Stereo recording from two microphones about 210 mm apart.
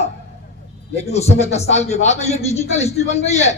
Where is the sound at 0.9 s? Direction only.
30° left (ahead or behind).